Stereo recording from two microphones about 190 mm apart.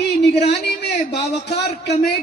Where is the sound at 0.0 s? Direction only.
60° left (ahead or behind).